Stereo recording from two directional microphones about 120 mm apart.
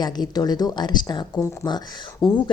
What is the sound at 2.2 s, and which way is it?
Speech, centre (ahead or behind).